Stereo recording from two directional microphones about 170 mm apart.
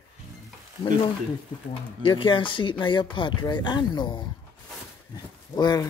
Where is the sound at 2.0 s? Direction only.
30° left (ahead or behind).